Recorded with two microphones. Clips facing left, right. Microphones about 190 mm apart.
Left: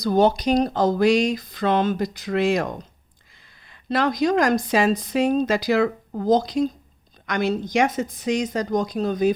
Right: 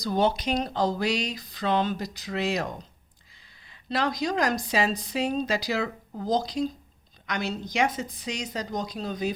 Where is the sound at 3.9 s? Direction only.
55° left (ahead or behind).